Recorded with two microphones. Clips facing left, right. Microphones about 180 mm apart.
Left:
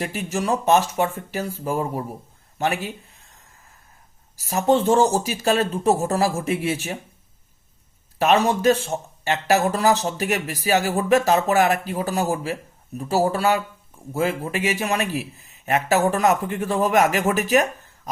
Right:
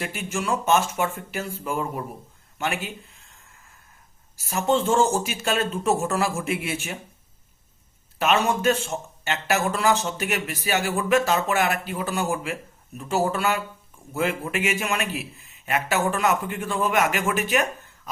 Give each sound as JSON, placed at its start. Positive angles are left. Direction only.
{"t": 0.0, "sound": "a man's voice", "side_deg": 35}
{"t": 4.4, "sound": "a man's voice", "side_deg": 35}
{"t": 8.2, "sound": "a man's voice", "side_deg": 35}